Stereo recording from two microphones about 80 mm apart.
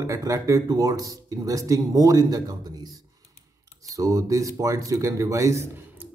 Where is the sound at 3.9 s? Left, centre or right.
Right.